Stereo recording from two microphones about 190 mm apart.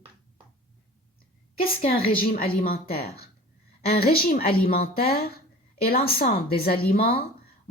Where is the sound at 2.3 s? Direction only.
50° left (ahead or behind).